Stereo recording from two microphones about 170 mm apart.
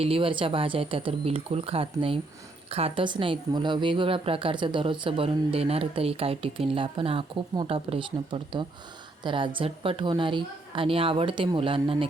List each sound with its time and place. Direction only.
0.0 s a woman's voice: 30° right (ahead or behind)